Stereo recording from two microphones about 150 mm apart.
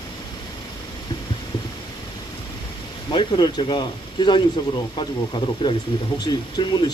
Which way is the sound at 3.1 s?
35° left (ahead or behind).